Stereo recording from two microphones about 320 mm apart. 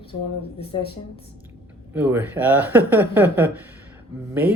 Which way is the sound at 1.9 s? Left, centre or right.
Centre.